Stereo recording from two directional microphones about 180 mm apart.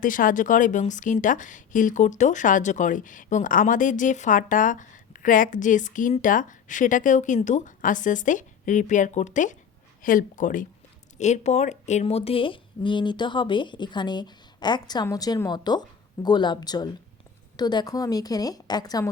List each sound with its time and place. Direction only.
0.0 s speech: 50° left (ahead or behind); by 19.1 s 20° left (ahead or behind)